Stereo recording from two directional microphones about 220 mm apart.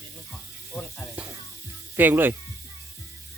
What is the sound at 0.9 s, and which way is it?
Sizzle, 5° right (ahead or behind).